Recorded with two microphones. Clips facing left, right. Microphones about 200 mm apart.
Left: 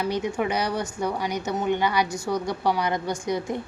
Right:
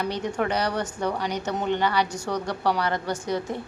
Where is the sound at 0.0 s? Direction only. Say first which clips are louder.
Left 1 dB; 10° left (ahead or behind).